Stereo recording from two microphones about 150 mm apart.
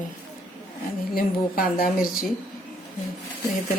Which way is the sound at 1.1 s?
75° left (ahead or behind).